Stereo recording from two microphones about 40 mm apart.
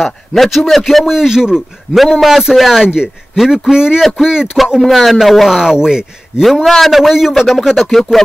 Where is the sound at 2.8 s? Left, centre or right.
Centre.